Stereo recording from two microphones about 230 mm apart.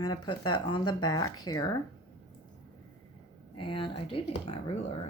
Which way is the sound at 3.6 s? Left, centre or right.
Left.